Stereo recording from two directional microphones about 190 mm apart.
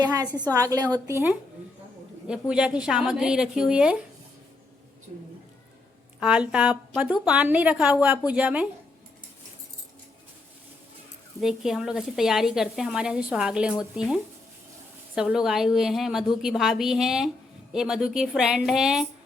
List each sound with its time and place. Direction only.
0.0 s a woman's voice: 20° right (ahead or behind)
6.1 s a woman's voice: 5° right (ahead or behind)
11.3 s a woman's voice: centre (ahead or behind)